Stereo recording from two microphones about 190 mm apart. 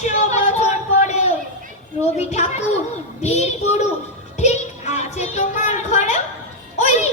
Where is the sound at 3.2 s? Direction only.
35° left (ahead or behind).